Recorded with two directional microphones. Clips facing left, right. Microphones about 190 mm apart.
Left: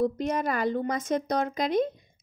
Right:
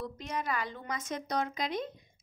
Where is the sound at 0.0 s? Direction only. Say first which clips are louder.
Left 11 dB; 50° left (ahead or behind).